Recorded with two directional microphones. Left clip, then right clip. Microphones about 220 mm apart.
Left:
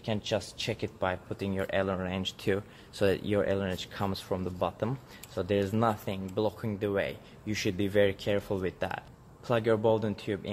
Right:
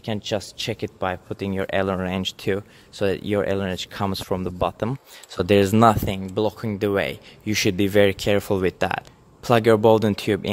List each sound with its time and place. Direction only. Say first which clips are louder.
0.0 s speech: right 5 dB; 50° right (ahead or behind)